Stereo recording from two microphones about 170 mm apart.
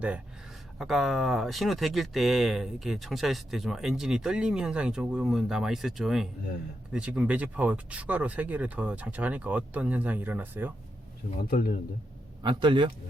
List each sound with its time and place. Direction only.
0.8 s speech: centre (ahead or behind)
11.4 s speech: 55° left (ahead or behind)
12.4 s a man's voice: 25° right (ahead or behind)